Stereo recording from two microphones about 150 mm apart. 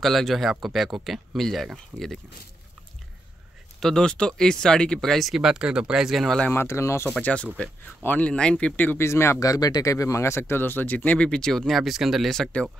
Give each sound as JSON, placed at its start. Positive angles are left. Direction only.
{"t": 0.0, "sound": "speech", "side_deg": 0}
{"t": 3.8, "sound": "speech", "side_deg": 5}
{"t": 6.5, "sound": "speech", "side_deg": 15}